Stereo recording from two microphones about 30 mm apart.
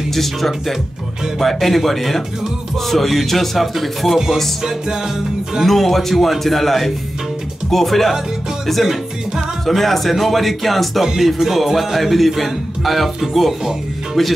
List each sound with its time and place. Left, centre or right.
0.1 s speech: centre
4.6 s music: centre
5.7 s speech: centre
9.7 s speech: centre